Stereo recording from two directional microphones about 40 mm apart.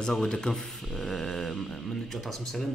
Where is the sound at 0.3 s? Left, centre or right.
Centre.